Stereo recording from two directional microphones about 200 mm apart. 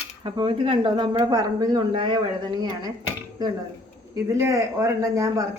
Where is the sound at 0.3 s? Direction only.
25° right (ahead or behind).